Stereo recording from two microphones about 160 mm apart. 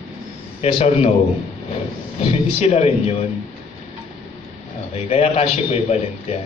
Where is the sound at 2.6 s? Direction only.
40° left (ahead or behind).